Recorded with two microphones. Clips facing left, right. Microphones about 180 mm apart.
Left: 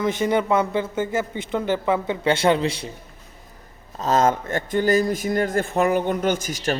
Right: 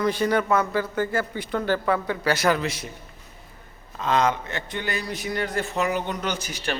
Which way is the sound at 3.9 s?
40° left (ahead or behind).